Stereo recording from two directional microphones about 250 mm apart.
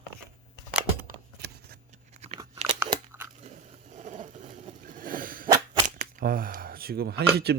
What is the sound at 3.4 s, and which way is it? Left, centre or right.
Vehicle, right.